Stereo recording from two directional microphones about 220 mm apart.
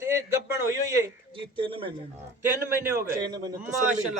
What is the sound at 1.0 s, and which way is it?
Speech, 20° right (ahead or behind).